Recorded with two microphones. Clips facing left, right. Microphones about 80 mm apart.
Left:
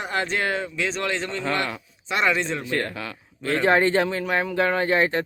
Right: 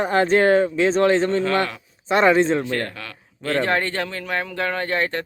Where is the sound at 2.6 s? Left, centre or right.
Centre.